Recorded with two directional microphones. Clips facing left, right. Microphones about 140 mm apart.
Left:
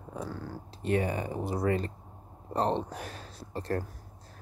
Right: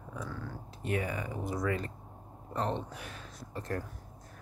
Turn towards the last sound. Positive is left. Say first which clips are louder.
# left 4 dB
turn(degrees=30)  # may be behind; listen again after turning